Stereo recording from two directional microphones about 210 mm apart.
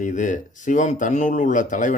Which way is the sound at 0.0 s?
35° left (ahead or behind).